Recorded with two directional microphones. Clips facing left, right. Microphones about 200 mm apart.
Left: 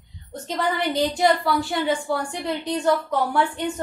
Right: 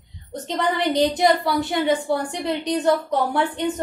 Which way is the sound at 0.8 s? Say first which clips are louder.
Right 4 dB; 20° right (ahead or behind).